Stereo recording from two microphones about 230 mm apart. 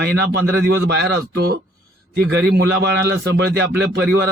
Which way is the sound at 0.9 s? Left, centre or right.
Right.